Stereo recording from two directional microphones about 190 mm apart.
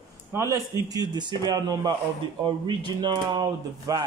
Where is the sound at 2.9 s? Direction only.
20° right (ahead or behind).